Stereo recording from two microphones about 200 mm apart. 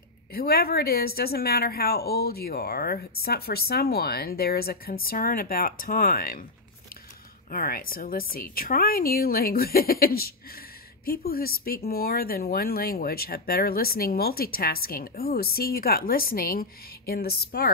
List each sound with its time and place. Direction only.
0.3 s speech: 50° left (ahead or behind)
7.5 s speech: 45° left (ahead or behind)